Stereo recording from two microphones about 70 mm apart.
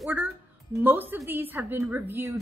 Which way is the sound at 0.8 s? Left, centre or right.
Right.